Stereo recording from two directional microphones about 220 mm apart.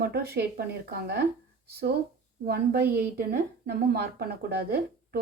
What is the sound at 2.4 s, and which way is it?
A woman's voice, 45° right (ahead or behind).